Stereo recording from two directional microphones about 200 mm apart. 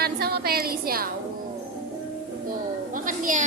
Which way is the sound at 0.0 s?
50° right (ahead or behind).